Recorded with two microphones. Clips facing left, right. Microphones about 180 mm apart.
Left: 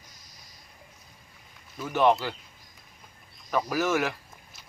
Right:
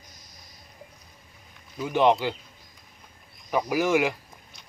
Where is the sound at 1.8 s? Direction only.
15° right (ahead or behind).